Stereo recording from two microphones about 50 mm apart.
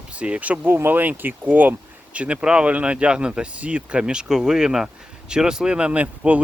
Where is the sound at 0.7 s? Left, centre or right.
Right.